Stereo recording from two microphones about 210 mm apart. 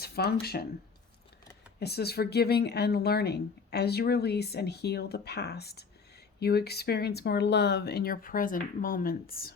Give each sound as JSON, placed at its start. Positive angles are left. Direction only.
{"t": 0.0, "sound": "speech", "side_deg": 50}
{"t": 1.8, "sound": "speech", "side_deg": 50}